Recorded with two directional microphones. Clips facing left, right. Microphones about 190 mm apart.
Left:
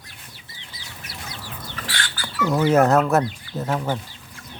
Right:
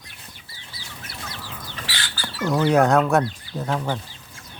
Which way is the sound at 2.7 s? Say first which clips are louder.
Left 1 dB; 5° left (ahead or behind).